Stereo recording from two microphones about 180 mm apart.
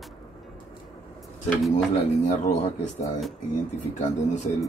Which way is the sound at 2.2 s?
40° left (ahead or behind).